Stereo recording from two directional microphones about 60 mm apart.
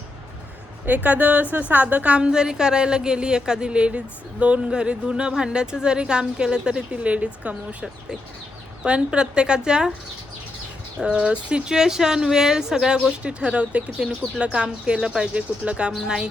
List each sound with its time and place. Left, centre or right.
0.9 s a woman's voice: right
11.0 s a woman's voice: centre